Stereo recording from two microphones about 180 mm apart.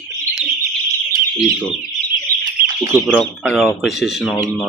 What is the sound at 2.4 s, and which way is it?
Fowl, 15° right (ahead or behind).